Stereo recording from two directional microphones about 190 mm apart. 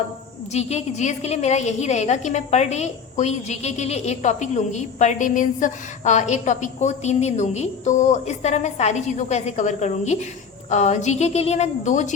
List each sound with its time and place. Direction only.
0.5 s a woman's voice: 35° left (ahead or behind)